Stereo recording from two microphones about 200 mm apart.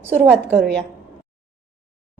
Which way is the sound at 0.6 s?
5° left (ahead or behind).